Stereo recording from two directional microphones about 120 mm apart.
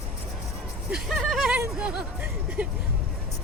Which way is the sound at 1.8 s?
5° right (ahead or behind).